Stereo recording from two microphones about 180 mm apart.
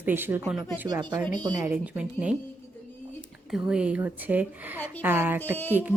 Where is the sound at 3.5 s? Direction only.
5° right (ahead or behind).